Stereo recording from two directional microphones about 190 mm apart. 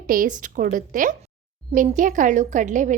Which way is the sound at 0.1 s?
45° right (ahead or behind).